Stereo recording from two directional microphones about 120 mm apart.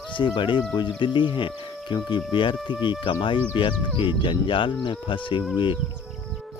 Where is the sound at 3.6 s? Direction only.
40° left (ahead or behind).